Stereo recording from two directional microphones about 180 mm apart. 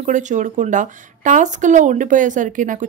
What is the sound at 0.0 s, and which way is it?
A woman's voice, 45° right (ahead or behind).